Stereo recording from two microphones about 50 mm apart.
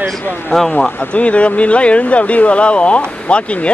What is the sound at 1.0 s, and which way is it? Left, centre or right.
Speech, left.